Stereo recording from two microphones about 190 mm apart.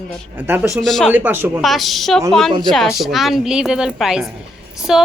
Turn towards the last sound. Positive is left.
turn(degrees=0)  # may be behind; listen again after turning